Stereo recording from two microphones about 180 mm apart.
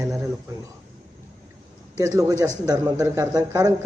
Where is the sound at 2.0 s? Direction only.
20° right (ahead or behind).